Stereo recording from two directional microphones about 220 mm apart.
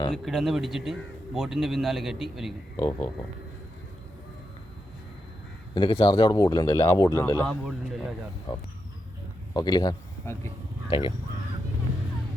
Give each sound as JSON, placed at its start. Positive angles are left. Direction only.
{"t": 0.1, "sound": "a man's voice", "side_deg": 0}
{"t": 2.7, "sound": "a man's voice", "side_deg": 20}
{"t": 5.7, "sound": "a man's voice", "side_deg": 20}
{"t": 8.5, "sound": "a man's voice", "side_deg": 20}